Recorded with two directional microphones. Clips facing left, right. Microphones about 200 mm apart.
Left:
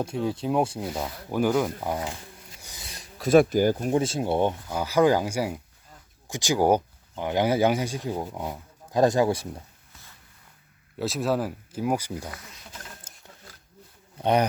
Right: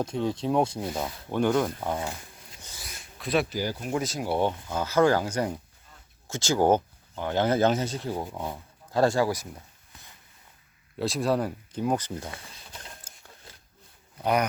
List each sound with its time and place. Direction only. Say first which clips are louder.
0.0 s speech: even; 5° left (ahead or behind)
2.6 s a sound: even; 15° left (ahead or behind)
2.8 s speech: left 7 dB; 35° left (ahead or behind)
10.9 s speech: even; centre (ahead or behind)
12.3 s a sound: left 1 dB; 30° right (ahead or behind)
14.2 s speech: left 3 dB; 30° left (ahead or behind)